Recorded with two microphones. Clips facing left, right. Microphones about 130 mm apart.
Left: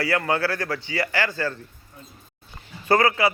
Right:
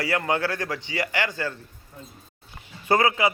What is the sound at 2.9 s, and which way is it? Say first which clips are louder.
Speech: left 1 dB; 20° right (ahead or behind).